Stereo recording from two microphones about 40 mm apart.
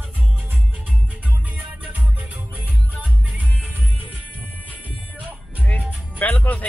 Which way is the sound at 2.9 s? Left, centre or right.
Right.